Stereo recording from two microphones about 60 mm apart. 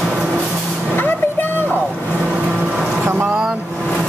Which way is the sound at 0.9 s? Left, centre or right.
Left.